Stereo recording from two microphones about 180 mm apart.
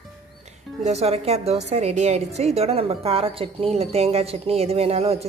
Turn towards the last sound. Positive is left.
turn(degrees=-35)  # may be behind; listen again after turning